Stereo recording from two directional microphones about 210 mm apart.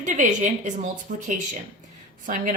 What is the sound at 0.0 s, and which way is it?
A woman's voice, 35° right (ahead or behind).